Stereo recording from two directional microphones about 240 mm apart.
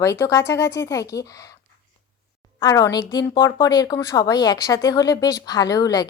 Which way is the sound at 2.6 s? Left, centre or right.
Centre.